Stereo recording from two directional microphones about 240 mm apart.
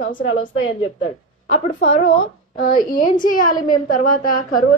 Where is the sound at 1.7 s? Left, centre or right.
Left.